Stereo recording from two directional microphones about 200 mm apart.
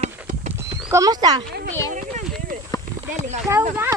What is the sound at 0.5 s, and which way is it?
Horse, 15° right (ahead or behind).